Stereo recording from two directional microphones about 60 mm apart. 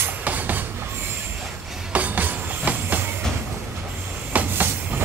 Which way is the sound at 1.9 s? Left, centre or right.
Right.